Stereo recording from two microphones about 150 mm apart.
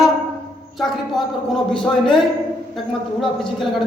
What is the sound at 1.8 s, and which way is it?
A man's voice, 5° left (ahead or behind).